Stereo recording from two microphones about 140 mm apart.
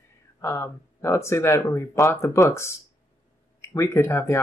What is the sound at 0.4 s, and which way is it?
Speech, 20° left (ahead or behind).